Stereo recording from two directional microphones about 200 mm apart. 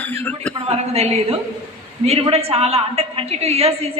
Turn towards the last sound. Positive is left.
turn(degrees=-30)  # may be behind; listen again after turning